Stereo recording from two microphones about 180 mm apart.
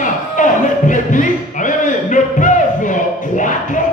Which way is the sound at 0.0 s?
45° left (ahead or behind).